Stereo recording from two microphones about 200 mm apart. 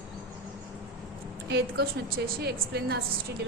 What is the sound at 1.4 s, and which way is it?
A woman's voice, 55° right (ahead or behind).